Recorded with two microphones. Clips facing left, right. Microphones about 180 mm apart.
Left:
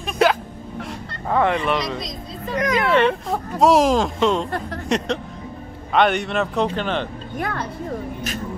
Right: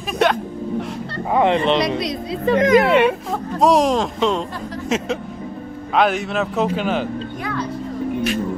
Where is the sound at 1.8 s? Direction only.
65° right (ahead or behind).